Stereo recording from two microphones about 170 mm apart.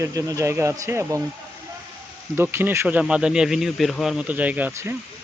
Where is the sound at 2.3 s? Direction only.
15° right (ahead or behind).